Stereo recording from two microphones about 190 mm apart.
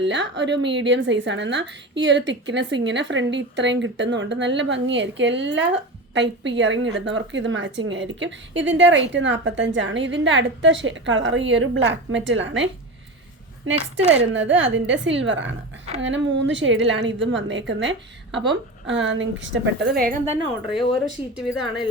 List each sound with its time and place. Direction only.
0.0 s a woman's voice: 70° right (ahead or behind)
14.3 s a woman's voice: 75° right (ahead or behind)
20.7 s speech: centre (ahead or behind)